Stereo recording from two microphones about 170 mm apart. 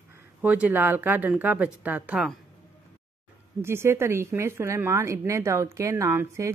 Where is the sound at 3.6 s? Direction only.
15° right (ahead or behind).